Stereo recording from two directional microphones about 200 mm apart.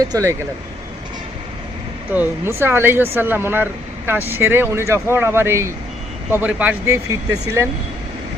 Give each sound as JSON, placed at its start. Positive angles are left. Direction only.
{"t": 0.0, "sound": "speech", "side_deg": -15}
{"t": 2.1, "sound": "speech", "side_deg": -10}